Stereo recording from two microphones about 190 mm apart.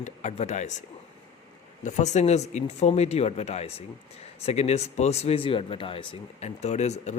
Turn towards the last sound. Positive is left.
turn(degrees=35)  # may be behind; listen again after turning